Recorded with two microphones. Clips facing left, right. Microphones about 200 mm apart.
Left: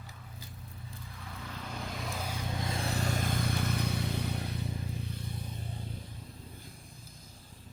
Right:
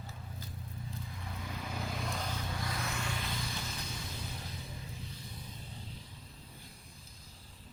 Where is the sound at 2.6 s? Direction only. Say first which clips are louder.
Left 4 dB; 25° left (ahead or behind); by 4.5 s 65° left (ahead or behind).